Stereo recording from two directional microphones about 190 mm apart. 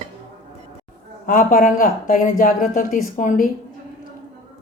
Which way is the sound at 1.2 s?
45° left (ahead or behind).